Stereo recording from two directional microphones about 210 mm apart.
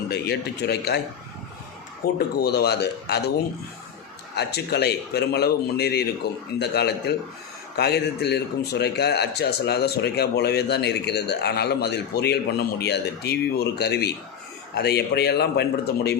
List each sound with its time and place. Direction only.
0.1 s a man's voice: 50° left (ahead or behind)
2.1 s a man's voice: 50° left (ahead or behind)
4.4 s a man's voice: 50° left (ahead or behind)